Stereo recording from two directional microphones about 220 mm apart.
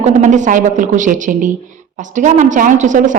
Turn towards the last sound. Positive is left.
turn(degrees=-35)  # may be behind; listen again after turning